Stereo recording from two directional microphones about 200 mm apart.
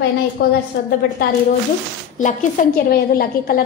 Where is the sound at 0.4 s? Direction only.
50° left (ahead or behind).